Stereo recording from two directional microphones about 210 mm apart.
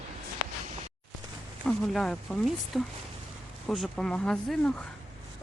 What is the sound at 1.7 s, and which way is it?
Speech, 5° left (ahead or behind).